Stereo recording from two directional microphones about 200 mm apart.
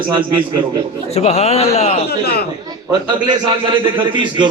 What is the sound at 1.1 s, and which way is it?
Speech, 35° left (ahead or behind).